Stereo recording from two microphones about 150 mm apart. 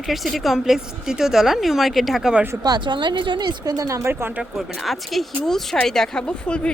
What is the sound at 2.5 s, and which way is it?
Speech, 25° right (ahead or behind).